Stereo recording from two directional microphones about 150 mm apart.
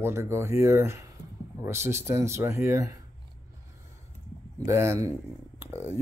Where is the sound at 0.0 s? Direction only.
15° right (ahead or behind).